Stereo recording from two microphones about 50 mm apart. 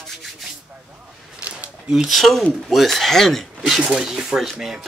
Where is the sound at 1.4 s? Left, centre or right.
Right.